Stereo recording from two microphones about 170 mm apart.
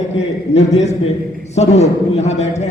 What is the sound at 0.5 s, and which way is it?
A man's voice, 40° left (ahead or behind).